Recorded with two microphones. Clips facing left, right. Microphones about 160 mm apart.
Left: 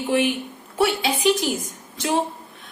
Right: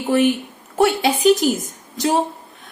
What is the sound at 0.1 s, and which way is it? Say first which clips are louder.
A woman's voice: right 5 dB; 45° right (ahead or behind).